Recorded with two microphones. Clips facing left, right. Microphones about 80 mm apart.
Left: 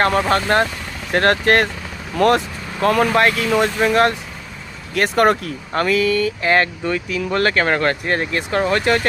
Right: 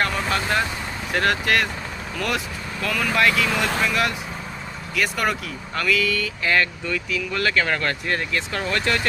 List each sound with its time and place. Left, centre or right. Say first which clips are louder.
0.0 s speech: left 7 dB; left